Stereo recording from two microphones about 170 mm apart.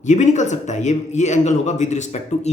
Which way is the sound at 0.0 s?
45° left (ahead or behind).